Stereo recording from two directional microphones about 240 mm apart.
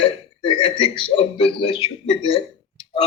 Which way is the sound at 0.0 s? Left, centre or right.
Left.